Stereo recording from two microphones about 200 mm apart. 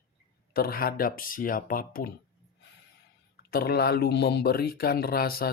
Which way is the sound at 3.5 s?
50° left (ahead or behind).